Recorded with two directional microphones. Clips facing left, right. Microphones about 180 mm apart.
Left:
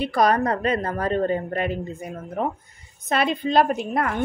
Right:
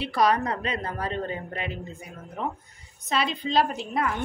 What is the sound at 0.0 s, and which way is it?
A woman's voice, 45° left (ahead or behind).